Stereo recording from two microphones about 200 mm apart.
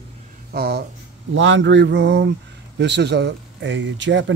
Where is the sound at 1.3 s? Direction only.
65° right (ahead or behind).